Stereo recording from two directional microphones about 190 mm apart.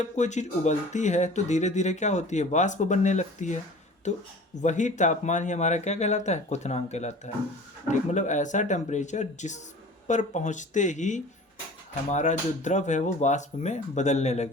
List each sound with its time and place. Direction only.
0.0 s speech: 40° left (ahead or behind)
4.6 s speech: 40° left (ahead or behind)